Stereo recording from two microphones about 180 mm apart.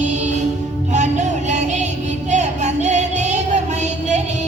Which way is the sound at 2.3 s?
40° right (ahead or behind).